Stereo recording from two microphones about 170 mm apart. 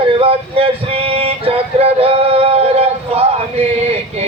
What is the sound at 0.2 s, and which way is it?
Male singing, 35° right (ahead or behind).